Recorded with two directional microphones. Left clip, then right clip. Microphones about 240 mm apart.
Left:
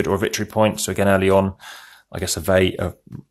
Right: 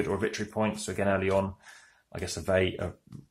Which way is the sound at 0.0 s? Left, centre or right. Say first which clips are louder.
Left 9 dB; left.